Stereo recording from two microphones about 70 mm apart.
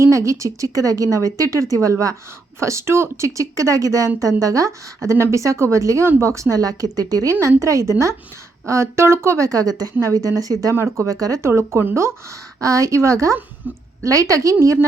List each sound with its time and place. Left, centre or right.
0.0 s a woman's voice: right
5.0 s a woman's voice: right
7.3 s speech: right
10.8 s speech: right
11.1 s speech: right
12.5 s speech: right
13.6 s a woman's voice: right
14.0 s speech: right